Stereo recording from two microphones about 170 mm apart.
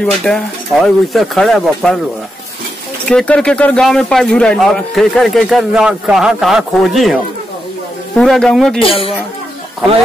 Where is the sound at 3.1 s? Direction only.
5° left (ahead or behind).